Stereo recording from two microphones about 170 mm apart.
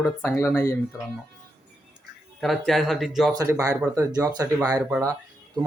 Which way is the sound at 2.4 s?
Centre (ahead or behind).